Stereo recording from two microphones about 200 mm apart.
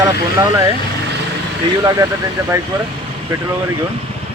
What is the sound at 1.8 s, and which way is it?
Speech, 20° right (ahead or behind).